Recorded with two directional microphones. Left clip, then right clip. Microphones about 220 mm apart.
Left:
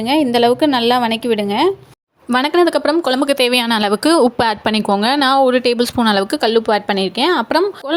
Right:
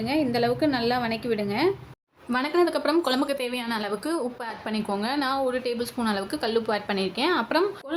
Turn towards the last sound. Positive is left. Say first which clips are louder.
# left 9 dB
turn(degrees=30)  # may be behind; listen again after turning